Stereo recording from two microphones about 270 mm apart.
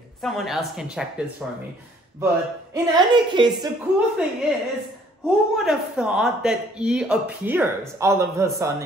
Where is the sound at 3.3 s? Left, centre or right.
Centre.